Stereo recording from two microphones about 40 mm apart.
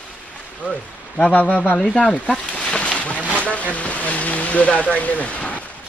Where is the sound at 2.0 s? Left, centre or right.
Left.